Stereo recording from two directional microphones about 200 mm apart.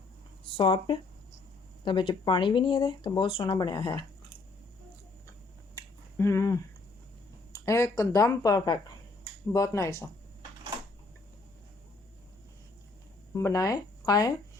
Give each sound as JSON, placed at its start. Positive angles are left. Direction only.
{"t": 0.5, "sound": "speech", "side_deg": 25}
{"t": 5.7, "sound": "a sound", "side_deg": 15}
{"t": 7.5, "sound": "speech", "side_deg": 15}
{"t": 13.3, "sound": "speech", "side_deg": 15}